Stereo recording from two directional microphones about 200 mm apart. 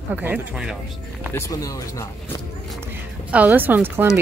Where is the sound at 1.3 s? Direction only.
15° left (ahead or behind).